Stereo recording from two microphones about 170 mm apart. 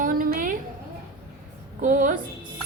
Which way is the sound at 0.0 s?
55° right (ahead or behind).